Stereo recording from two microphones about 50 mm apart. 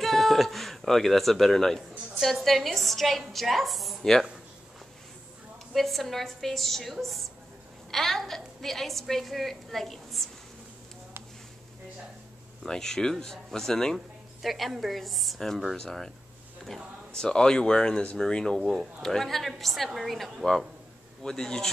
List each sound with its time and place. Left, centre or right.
0.0 s a woman's voice: centre
5.7 s a woman's voice: centre
12.6 s speech: centre
13.9 s a woman's voice: centre
17.1 s speech: centre
18.6 s a woman's voice: centre
21.2 s speech: centre